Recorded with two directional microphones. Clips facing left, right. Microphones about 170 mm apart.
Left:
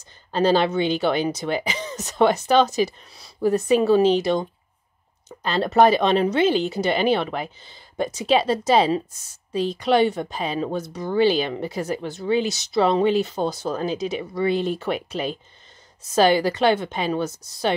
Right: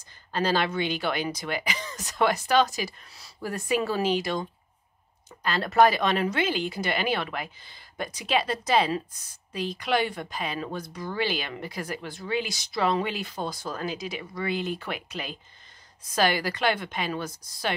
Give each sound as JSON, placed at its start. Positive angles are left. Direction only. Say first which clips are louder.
{"t": 0.3, "sound": "a woman's voice", "louder": "left 7 dB", "side_deg": 25}